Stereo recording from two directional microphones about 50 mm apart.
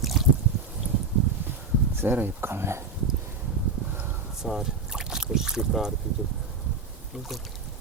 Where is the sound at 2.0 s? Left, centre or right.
Right.